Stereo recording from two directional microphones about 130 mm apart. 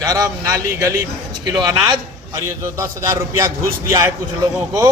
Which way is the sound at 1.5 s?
30° right (ahead or behind).